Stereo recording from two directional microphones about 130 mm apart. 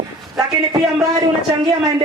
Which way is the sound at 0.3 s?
30° right (ahead or behind).